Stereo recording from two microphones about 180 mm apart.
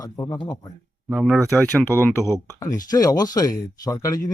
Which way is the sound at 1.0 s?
5° right (ahead or behind).